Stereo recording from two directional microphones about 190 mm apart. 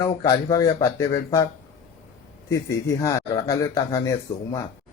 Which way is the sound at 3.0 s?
20° left (ahead or behind).